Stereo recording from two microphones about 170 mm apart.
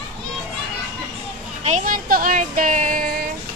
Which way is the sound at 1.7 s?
55° right (ahead or behind).